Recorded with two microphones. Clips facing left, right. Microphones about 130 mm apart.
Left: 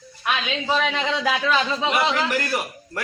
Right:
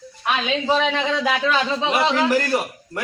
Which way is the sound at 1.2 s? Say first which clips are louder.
Left 1 dB; 15° right (ahead or behind).